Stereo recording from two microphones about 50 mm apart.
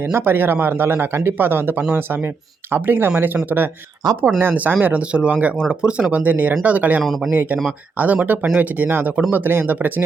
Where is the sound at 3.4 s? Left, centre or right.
Right.